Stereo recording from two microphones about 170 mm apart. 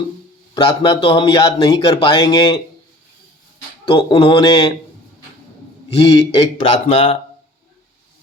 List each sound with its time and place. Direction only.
0.5 s speech: 30° left (ahead or behind)
3.8 s speech: 30° left (ahead or behind)
6.0 s speech: 30° left (ahead or behind)
6.8 s speech: 45° left (ahead or behind)